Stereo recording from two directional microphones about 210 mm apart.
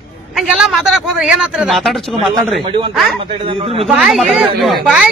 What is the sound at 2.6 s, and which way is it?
A man's voice, 25° right (ahead or behind).